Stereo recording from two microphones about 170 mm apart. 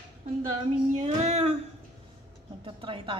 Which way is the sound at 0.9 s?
40° right (ahead or behind).